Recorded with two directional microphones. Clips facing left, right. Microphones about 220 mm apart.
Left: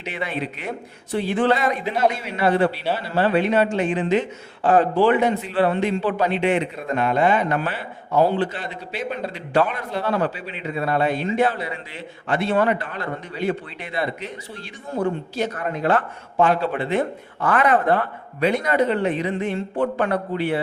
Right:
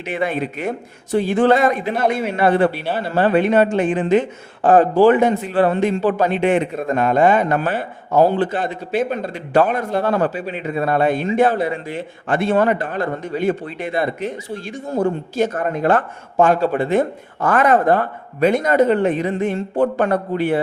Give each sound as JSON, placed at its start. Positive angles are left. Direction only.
{"t": 0.0, "sound": "speech", "side_deg": -50}